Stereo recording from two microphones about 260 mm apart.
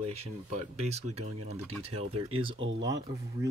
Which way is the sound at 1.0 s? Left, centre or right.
Right.